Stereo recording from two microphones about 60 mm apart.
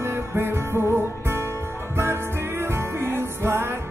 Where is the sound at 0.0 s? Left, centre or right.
Right.